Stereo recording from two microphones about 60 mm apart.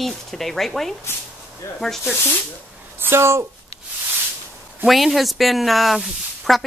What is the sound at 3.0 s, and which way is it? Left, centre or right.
Speech, right.